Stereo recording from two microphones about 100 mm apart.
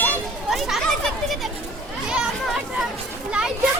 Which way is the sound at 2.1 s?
5° right (ahead or behind).